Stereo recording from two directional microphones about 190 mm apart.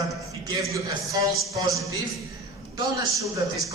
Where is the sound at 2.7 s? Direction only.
15° right (ahead or behind).